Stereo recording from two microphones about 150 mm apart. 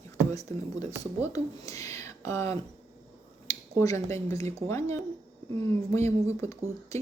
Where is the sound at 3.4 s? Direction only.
20° left (ahead or behind).